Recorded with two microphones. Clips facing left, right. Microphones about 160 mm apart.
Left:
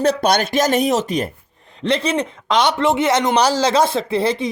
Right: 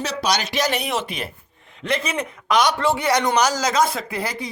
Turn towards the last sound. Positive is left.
turn(degrees=25)  # may be behind; listen again after turning